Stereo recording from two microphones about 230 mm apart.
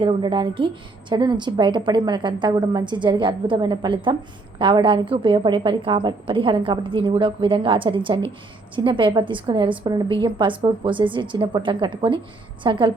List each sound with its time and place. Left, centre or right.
0.0 s a woman's voice: right